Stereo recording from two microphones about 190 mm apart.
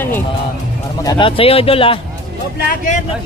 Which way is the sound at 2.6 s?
45° left (ahead or behind).